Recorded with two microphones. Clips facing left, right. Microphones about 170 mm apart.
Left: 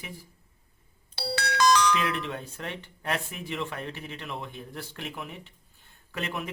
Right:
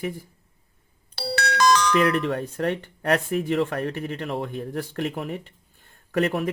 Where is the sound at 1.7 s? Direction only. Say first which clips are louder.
Right 5 dB; 55° right (ahead or behind).